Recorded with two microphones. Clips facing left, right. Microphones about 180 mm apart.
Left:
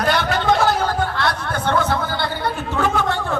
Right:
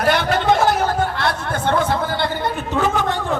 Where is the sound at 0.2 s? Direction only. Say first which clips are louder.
Right 1 dB; 25° right (ahead or behind).